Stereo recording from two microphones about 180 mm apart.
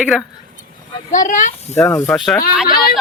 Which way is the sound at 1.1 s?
45° left (ahead or behind).